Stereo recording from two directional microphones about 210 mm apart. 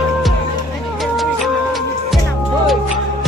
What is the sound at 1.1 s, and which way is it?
Music, centre (ahead or behind).